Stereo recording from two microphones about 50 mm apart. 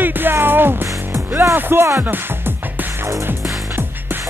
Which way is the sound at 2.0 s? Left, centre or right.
Right.